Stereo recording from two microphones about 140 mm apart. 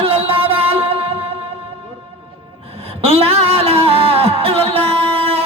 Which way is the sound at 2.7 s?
45° right (ahead or behind).